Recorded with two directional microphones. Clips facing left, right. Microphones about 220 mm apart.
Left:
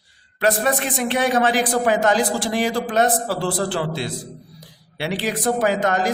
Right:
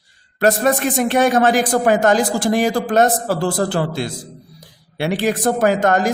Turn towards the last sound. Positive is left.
turn(degrees=-50)  # may be behind; listen again after turning